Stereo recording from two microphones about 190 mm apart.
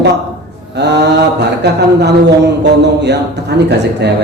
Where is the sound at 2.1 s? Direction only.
60° right (ahead or behind).